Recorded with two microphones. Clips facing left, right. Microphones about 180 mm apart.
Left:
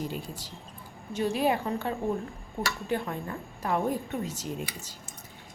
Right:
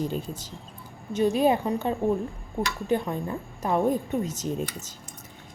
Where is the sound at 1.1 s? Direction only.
20° right (ahead or behind).